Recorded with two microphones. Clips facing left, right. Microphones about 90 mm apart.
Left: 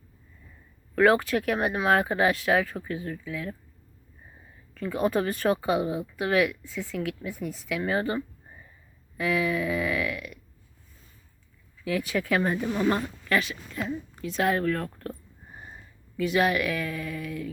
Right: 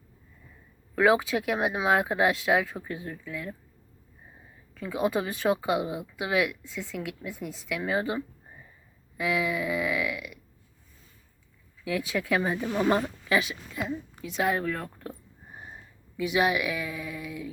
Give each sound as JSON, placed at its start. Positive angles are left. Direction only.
{"t": 0.9, "sound": "speech", "side_deg": -5}
{"t": 4.7, "sound": "speech", "side_deg": -5}
{"t": 11.9, "sound": "speech", "side_deg": 0}